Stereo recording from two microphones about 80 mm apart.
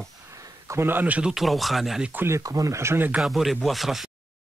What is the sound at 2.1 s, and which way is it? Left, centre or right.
Speech, right.